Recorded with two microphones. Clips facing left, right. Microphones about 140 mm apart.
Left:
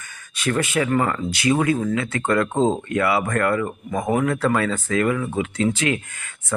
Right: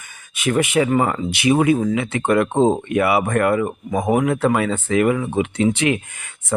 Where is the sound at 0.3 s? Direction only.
15° right (ahead or behind).